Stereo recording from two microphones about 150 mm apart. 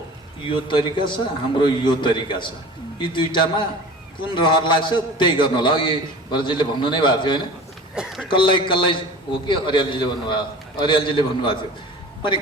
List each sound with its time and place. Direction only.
0.4 s a man's voice: 35° left (ahead or behind)
7.9 s speech: centre (ahead or behind)
8.3 s a man's voice: 30° left (ahead or behind)